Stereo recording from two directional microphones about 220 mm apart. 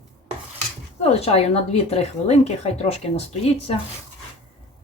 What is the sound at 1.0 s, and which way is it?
Speech, 25° left (ahead or behind).